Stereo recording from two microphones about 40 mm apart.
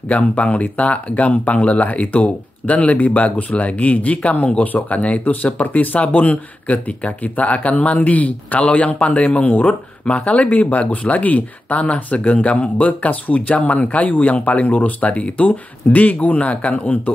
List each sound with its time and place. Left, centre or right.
0.4 s speech: left